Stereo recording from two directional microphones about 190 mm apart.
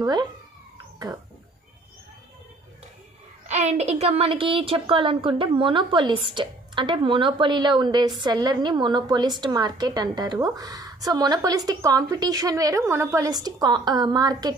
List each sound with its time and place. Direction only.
0.0 s a woman's voice: 20° right (ahead or behind)
3.4 s a woman's voice: 35° right (ahead or behind); by 14.5 s 20° right (ahead or behind)